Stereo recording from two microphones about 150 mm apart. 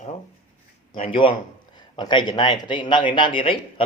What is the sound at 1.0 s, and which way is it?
Speech, 35° left (ahead or behind).